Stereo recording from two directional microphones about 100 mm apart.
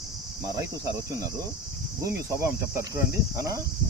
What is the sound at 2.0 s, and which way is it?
Cricket, 30° right (ahead or behind).